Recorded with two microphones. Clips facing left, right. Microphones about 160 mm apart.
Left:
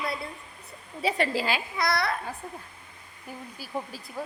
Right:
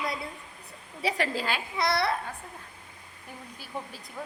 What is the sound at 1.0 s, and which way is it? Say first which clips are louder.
Speech: left 3 dB; centre (ahead or behind).